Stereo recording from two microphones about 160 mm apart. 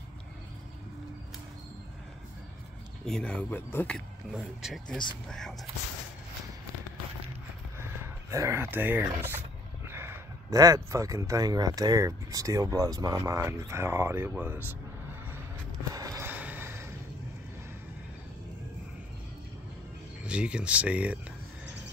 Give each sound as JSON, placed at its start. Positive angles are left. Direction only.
{"t": 3.1, "sound": "speech", "side_deg": 5}
{"t": 4.3, "sound": "speech", "side_deg": -5}
{"t": 7.8, "sound": "speech", "side_deg": -15}
{"t": 16.2, "sound": "vehicle", "side_deg": -10}
{"t": 20.2, "sound": "speech", "side_deg": -5}